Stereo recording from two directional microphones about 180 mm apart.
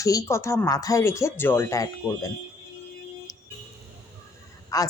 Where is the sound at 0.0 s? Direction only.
20° left (ahead or behind).